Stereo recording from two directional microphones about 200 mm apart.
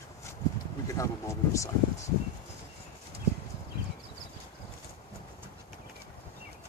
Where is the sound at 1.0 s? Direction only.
15° left (ahead or behind).